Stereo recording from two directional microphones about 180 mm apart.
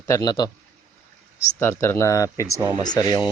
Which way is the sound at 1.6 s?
15° left (ahead or behind).